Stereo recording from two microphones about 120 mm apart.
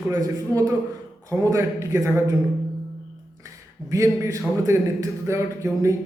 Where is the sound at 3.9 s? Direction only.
25° right (ahead or behind).